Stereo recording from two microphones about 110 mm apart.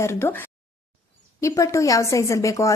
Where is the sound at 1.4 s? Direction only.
30° left (ahead or behind).